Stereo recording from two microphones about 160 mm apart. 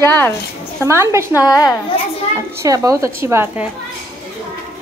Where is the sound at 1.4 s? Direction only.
20° left (ahead or behind).